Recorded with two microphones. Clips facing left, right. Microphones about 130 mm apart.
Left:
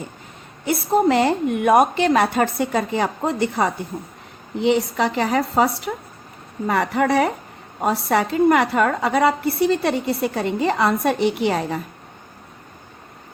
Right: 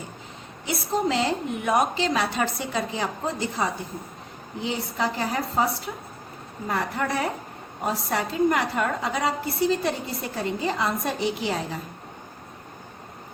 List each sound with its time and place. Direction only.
0.6 s a woman's voice: 55° left (ahead or behind)